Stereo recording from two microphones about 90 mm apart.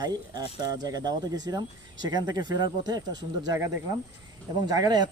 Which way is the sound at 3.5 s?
30° right (ahead or behind).